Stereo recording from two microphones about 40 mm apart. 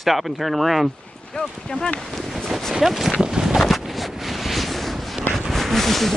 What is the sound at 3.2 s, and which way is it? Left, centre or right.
Boat, centre.